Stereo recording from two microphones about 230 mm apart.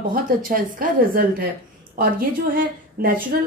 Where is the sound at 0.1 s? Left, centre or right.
Right.